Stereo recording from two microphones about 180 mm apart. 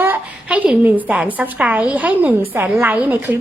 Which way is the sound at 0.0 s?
10° right (ahead or behind).